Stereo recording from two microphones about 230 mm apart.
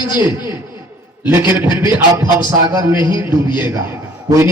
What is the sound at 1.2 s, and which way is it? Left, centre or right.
A man's voice, centre.